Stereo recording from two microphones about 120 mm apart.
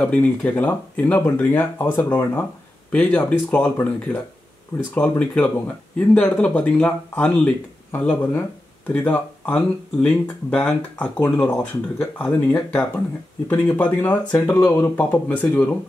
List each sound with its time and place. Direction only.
0.0 s speech: 10° left (ahead or behind)
4.9 s speech: 10° left (ahead or behind)
8.2 s speech: 20° left (ahead or behind)